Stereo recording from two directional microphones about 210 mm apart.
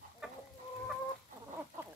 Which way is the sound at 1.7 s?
40° right (ahead or behind).